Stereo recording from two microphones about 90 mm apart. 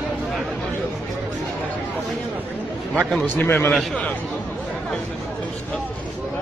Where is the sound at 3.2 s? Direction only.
20° left (ahead or behind).